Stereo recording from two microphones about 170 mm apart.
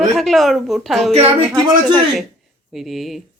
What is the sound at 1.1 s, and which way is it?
Speech, 30° right (ahead or behind).